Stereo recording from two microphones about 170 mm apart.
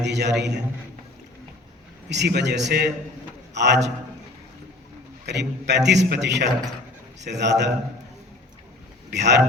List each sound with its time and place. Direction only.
0.0 s a man's voice: 90° right
2.0 s a man's voice: 85° right
5.2 s a man's voice: 85° right
9.0 s speech: 90° right